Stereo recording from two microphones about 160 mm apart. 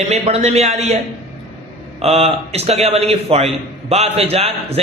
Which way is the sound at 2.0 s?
40° right (ahead or behind).